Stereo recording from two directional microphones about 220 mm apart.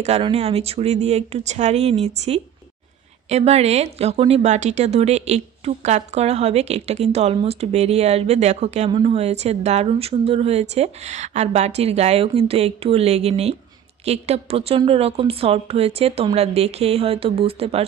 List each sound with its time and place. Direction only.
0.0 s speech: 25° right (ahead or behind)